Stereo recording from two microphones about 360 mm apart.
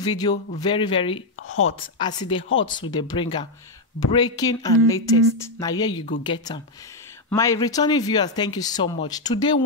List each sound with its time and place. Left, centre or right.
0.0 s speech: centre
1.5 s a woman's voice: left
2.0 s speech: centre